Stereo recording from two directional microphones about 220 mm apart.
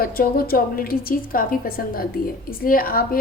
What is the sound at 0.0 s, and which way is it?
A woman's voice, 40° left (ahead or behind).